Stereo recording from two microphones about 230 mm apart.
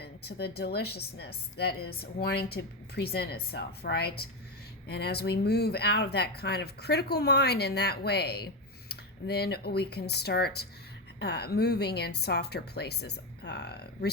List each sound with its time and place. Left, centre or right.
0.0 s a woman's voice: left